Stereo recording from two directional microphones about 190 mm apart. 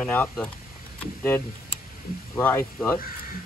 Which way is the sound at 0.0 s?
5° left (ahead or behind).